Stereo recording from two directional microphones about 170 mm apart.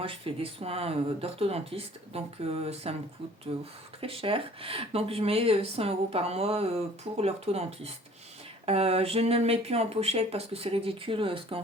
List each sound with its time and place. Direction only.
0.0 s speech: 30° right (ahead or behind)